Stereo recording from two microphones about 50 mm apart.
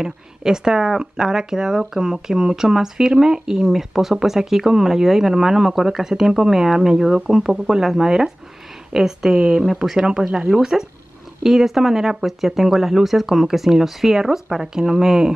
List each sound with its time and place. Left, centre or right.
0.0 s speech: centre